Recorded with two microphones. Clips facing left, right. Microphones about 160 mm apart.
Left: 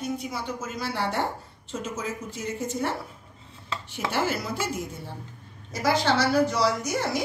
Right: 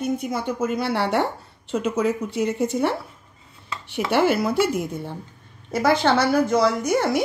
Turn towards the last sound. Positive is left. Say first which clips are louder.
# right 6 dB
turn(degrees=-55)  # may be behind; listen again after turning